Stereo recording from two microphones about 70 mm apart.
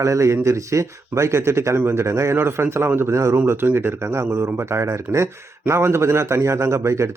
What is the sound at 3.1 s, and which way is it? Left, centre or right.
Speech, right.